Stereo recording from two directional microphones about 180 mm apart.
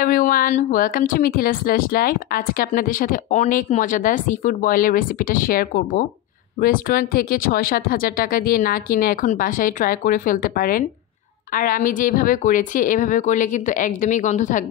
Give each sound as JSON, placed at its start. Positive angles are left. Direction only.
{"t": 0.0, "sound": "speech", "side_deg": 50}